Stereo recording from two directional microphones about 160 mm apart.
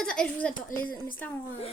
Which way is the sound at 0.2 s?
10° left (ahead or behind).